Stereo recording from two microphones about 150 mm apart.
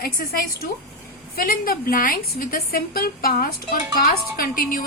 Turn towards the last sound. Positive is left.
turn(degrees=65)  # may be behind; listen again after turning